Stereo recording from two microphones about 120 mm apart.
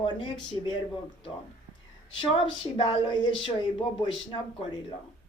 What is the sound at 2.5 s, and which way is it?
Speech, 45° left (ahead or behind).